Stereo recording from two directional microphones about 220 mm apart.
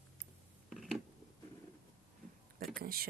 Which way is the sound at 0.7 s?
Centre (ahead or behind).